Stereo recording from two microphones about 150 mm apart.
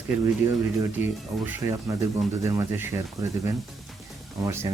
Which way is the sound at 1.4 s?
15° right (ahead or behind).